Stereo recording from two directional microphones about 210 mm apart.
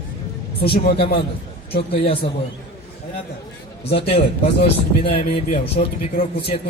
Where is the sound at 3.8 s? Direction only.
30° left (ahead or behind).